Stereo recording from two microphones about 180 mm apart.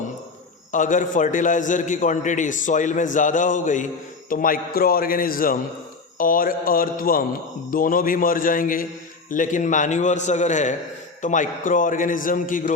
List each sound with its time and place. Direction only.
0.7 s a man's voice: 45° left (ahead or behind)